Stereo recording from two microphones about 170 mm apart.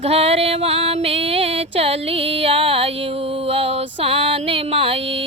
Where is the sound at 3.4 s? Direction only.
35° right (ahead or behind).